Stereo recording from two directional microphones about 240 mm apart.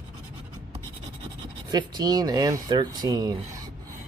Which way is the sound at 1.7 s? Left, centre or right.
Centre.